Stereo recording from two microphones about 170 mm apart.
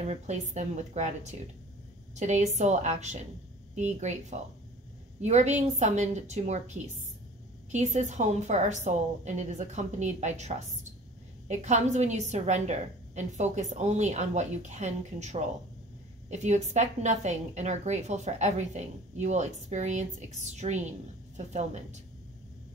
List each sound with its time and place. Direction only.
0.0 s a woman's voice: 40° right (ahead or behind)